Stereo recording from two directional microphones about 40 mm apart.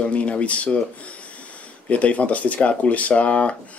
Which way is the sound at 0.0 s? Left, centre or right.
Left.